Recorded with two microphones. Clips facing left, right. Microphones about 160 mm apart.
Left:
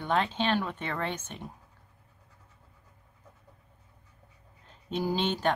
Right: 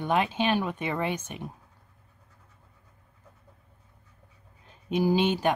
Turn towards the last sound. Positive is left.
turn(degrees=-10)  # may be behind; listen again after turning